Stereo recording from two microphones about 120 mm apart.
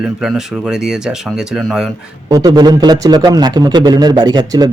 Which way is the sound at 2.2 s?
30° right (ahead or behind).